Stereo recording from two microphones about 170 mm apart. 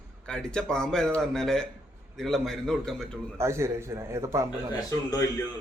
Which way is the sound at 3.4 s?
15° right (ahead or behind).